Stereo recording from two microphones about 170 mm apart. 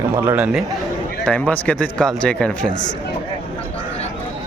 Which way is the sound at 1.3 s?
10° left (ahead or behind).